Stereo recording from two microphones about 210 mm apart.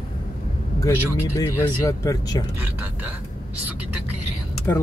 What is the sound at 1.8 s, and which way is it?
Speech, 15° left (ahead or behind).